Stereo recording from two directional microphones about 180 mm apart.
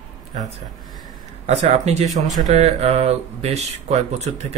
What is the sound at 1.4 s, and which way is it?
Speech, 40° right (ahead or behind).